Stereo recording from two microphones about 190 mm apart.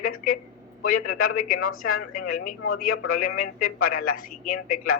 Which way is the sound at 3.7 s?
90° left.